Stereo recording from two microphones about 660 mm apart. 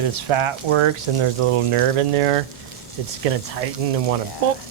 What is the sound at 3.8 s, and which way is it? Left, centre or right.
Frying, right.